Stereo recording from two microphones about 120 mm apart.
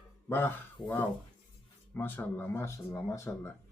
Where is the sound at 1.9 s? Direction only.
15° left (ahead or behind).